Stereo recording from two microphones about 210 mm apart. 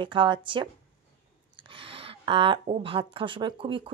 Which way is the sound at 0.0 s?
25° right (ahead or behind).